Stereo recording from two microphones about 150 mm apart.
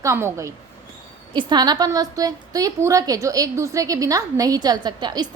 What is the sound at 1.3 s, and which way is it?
A woman's voice, 30° right (ahead or behind).